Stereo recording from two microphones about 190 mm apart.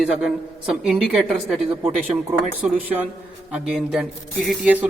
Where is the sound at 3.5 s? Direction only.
5° right (ahead or behind).